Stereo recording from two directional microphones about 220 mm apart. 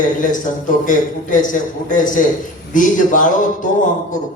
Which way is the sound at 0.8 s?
35° left (ahead or behind).